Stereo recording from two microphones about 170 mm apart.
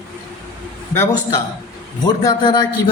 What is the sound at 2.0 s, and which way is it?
Speech, 25° left (ahead or behind).